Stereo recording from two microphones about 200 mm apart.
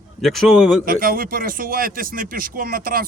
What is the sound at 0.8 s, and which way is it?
Speech, 45° right (ahead or behind).